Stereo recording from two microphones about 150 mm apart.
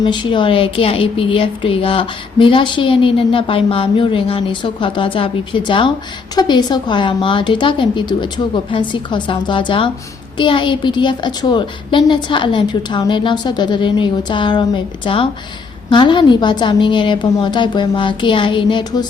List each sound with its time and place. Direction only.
0.0 s a woman's voice: 30° left (ahead or behind)